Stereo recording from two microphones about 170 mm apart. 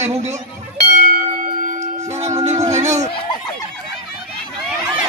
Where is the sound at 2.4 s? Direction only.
40° right (ahead or behind).